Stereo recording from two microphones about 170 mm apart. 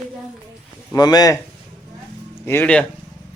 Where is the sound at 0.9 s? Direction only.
20° left (ahead or behind).